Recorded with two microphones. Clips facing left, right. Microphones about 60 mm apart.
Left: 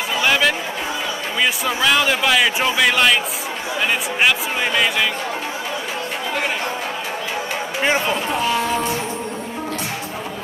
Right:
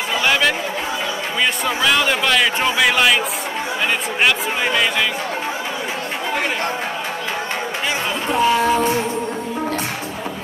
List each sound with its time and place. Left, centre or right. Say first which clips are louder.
0.2 s chatter: even; centre
1.4 s a man's voice: even; centre
8.4 s speech: right 9 dB; right